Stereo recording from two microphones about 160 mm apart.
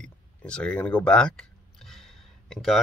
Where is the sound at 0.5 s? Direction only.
5° left (ahead or behind).